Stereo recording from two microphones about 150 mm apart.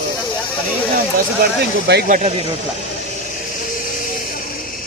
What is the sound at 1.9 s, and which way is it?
Speech, 75° right (ahead or behind).